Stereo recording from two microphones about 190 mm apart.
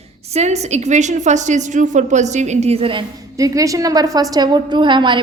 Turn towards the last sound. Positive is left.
turn(degrees=-25)  # may be behind; listen again after turning